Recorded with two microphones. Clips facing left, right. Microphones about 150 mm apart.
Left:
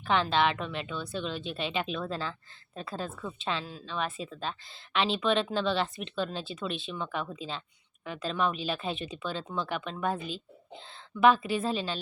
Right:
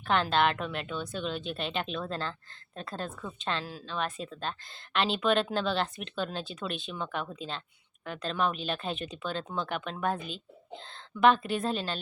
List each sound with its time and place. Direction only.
0.0 s speech: centre (ahead or behind)